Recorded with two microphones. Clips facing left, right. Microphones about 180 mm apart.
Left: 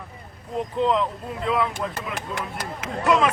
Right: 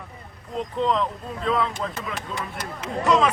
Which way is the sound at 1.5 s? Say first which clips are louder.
Even; 15° left (ahead or behind).